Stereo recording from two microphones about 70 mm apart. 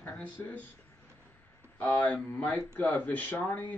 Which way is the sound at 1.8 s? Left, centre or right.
Left.